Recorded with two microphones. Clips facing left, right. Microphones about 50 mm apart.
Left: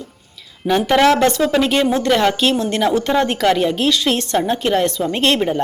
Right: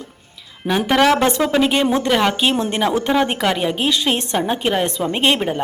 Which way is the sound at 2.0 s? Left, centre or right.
Centre.